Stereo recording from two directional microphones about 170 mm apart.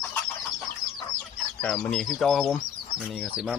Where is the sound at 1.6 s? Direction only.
5° left (ahead or behind).